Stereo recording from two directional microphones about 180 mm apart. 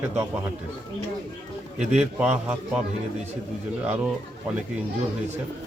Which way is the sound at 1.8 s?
5° right (ahead or behind).